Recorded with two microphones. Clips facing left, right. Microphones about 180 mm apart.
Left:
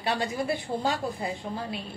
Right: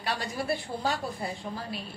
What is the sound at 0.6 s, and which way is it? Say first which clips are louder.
Speech: left 3 dB; 15° left (ahead or behind).